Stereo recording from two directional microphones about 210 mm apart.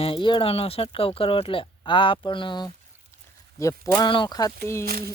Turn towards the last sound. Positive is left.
turn(degrees=15)  # may be behind; listen again after turning